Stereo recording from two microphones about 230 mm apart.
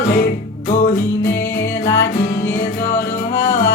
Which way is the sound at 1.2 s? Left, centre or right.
Centre.